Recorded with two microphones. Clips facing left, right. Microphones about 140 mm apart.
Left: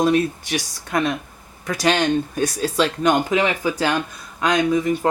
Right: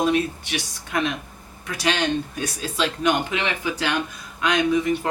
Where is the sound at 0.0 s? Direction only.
40° left (ahead or behind).